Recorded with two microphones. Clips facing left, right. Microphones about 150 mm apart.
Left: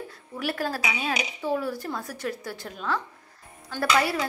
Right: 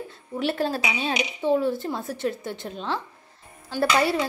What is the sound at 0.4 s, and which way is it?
A woman's voice, 25° right (ahead or behind).